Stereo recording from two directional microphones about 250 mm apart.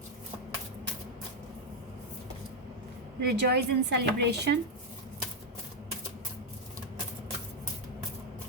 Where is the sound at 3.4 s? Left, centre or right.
Right.